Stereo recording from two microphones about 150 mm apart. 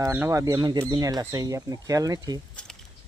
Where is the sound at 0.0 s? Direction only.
15° right (ahead or behind).